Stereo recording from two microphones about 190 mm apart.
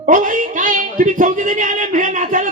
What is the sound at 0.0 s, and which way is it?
Speech, 45° right (ahead or behind).